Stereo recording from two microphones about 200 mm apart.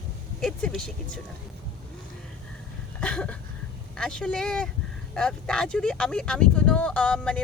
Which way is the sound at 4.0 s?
5° left (ahead or behind).